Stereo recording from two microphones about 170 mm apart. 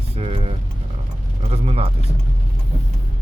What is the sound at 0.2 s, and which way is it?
Vehicle, 35° right (ahead or behind).